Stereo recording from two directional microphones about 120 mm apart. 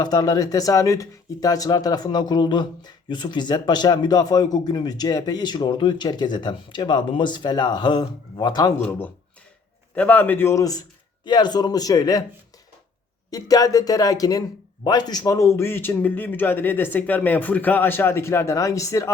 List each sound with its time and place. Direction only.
0.0 s speech: 35° left (ahead or behind)
9.9 s a man's voice: 10° left (ahead or behind); by 12.2 s 30° left (ahead or behind)
13.3 s a man's voice: 30° left (ahead or behind)